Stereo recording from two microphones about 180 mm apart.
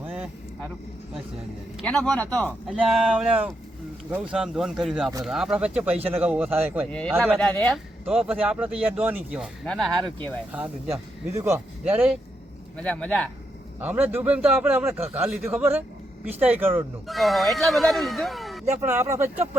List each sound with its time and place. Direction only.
1.8 s speech: 5° left (ahead or behind)
2.6 s a man's voice: 5° right (ahead or behind)
7.3 s speech: 5° left (ahead or behind)
8.0 s speech: 5° right (ahead or behind)
10.5 s a man's voice: 10° right (ahead or behind)
12.7 s speech: 5° left (ahead or behind)
13.7 s a man's voice: 10° right (ahead or behind)
17.1 s speech: centre (ahead or behind)
18.9 s a man's voice: 15° right (ahead or behind)